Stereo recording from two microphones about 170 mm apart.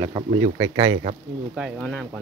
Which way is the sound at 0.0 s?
25° right (ahead or behind).